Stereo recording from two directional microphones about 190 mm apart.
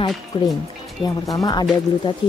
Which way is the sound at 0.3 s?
25° left (ahead or behind).